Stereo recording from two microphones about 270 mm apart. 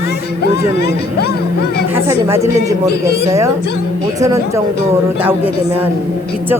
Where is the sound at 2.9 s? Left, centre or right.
Left.